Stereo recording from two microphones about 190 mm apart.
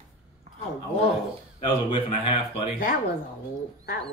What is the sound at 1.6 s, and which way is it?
A man's voice, 25° left (ahead or behind).